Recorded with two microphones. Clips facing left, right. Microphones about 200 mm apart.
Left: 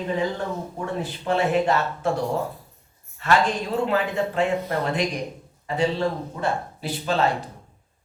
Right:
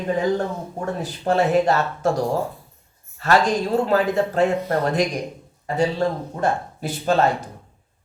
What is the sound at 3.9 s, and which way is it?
Speech, 40° right (ahead or behind).